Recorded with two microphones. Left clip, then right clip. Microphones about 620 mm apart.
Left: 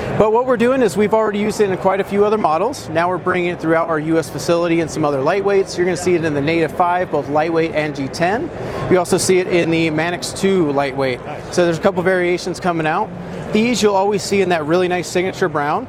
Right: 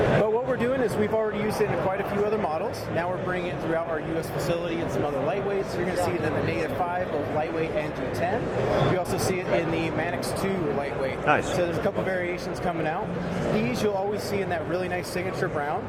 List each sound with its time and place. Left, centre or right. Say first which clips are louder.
0.2 s speech: left 10 dB; left
9.0 s speech: left 11 dB; left